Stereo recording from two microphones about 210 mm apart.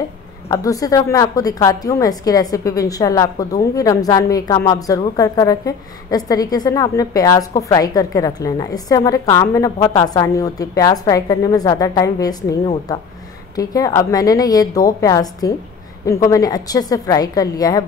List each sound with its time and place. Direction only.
0.5 s a woman's voice: 15° left (ahead or behind)